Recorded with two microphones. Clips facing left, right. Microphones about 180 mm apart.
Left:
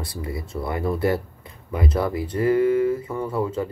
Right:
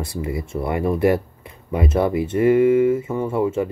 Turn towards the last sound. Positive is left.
turn(degrees=-25)  # may be behind; listen again after turning